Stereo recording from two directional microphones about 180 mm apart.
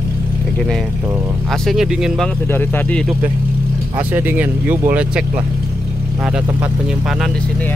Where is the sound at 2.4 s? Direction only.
10° left (ahead or behind).